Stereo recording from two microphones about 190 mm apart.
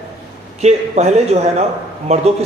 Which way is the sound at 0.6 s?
35° right (ahead or behind).